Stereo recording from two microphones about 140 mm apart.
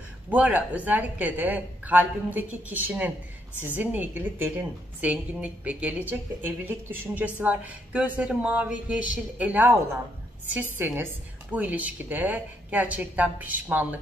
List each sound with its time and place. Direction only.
0.3 s speech: 10° right (ahead or behind)